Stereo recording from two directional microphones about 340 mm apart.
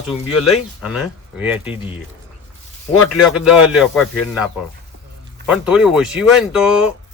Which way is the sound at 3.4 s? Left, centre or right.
Centre.